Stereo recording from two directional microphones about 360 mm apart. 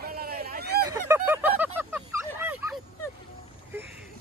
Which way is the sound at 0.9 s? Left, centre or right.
Centre.